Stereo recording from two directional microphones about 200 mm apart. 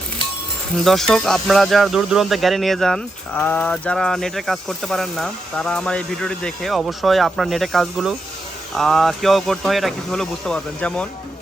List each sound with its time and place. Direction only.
0.9 s speech: centre (ahead or behind)